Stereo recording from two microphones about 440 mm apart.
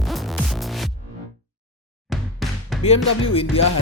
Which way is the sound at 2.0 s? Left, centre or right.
Centre.